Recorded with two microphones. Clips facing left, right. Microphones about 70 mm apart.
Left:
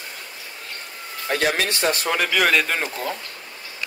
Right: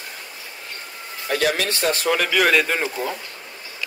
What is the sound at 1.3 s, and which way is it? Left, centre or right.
Speech, left.